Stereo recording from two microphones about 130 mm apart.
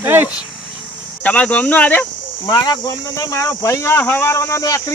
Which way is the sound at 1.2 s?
10° left (ahead or behind).